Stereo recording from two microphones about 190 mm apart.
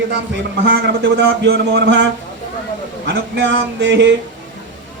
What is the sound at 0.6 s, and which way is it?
A man's voice, 65° right (ahead or behind).